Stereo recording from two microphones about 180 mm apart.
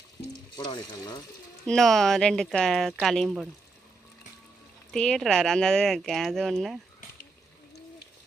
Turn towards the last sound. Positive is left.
turn(degrees=0)  # may be behind; listen again after turning